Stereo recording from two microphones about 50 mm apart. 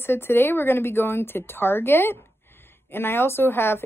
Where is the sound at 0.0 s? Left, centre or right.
Left.